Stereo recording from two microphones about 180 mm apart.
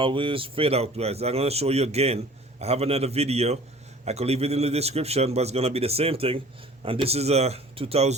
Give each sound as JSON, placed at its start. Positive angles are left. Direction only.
{"t": 0.0, "sound": "speech", "side_deg": -30}